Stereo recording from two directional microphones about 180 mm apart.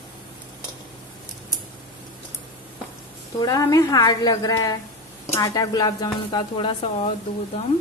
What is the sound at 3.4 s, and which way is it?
A woman's voice, 20° left (ahead or behind).